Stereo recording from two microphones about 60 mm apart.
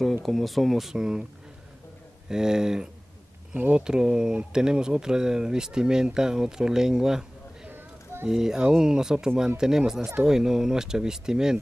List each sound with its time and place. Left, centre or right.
0.0 s speech: centre
2.2 s speech: centre
7.7 s a sound: right
8.3 s speech: centre